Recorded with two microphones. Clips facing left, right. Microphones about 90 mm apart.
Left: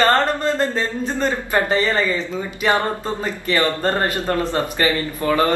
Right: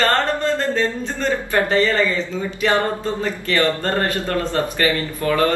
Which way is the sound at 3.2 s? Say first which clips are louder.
Even; 20° left (ahead or behind).